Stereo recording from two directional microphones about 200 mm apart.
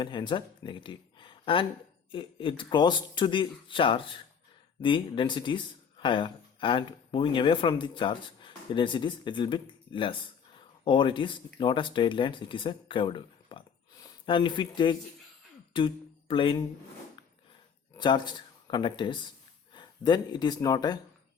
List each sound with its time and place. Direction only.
0.0 s speech: 25° left (ahead or behind)
17.9 s speech: 20° left (ahead or behind)